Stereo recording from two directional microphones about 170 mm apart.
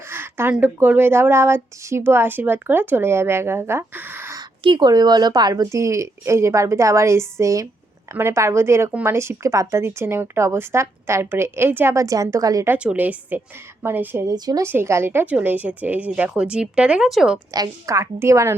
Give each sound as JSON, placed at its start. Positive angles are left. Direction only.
{"t": 0.1, "sound": "speech", "side_deg": -15}
{"t": 4.6, "sound": "speech", "side_deg": -25}
{"t": 14.3, "sound": "speech", "side_deg": -20}
{"t": 17.5, "sound": "speech", "side_deg": -20}